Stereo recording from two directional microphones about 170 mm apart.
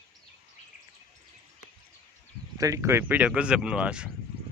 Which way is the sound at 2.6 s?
20° right (ahead or behind).